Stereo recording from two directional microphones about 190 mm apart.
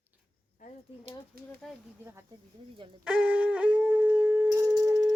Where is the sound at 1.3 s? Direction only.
50° right (ahead or behind).